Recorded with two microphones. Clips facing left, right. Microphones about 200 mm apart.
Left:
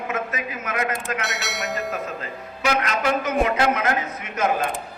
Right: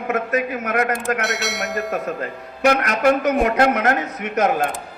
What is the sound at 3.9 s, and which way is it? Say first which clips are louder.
Speech: right 5 dB; 70° right (ahead or behind).